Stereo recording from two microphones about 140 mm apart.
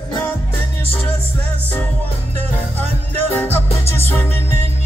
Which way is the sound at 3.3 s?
15° left (ahead or behind).